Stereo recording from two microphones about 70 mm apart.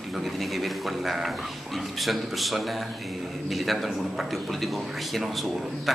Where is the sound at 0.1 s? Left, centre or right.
Centre.